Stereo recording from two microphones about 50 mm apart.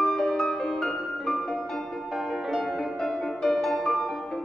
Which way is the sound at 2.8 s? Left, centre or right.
Centre.